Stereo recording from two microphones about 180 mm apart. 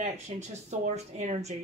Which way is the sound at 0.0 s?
40° right (ahead or behind).